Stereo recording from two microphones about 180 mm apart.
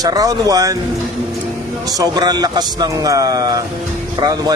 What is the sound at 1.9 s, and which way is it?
Speech, 20° right (ahead or behind).